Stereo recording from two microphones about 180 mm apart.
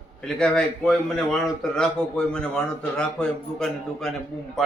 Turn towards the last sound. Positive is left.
turn(degrees=0)  # may be behind; listen again after turning